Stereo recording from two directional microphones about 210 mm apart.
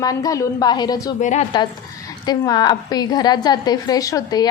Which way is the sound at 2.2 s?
20° left (ahead or behind).